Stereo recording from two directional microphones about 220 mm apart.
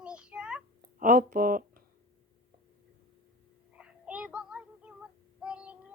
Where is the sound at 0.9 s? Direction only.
40° right (ahead or behind).